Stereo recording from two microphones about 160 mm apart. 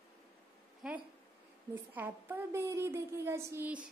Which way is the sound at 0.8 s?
5° right (ahead or behind).